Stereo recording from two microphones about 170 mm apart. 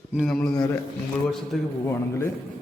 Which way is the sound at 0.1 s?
Centre (ahead or behind).